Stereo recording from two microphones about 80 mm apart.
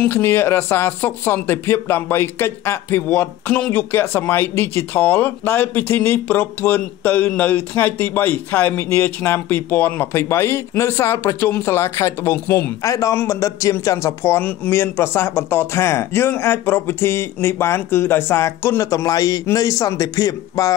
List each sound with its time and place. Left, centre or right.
0.0 s speech: left
12.8 s speech: left
14.4 s speech: left
14.8 s speech: left